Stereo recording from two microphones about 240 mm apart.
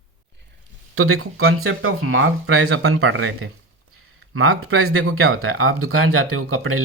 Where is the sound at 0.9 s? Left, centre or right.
Right.